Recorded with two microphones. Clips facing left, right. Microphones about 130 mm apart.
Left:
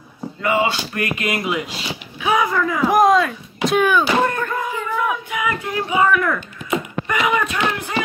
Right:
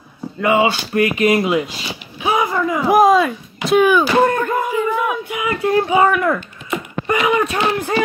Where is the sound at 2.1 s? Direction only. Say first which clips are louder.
Right 1 dB; 30° right (ahead or behind).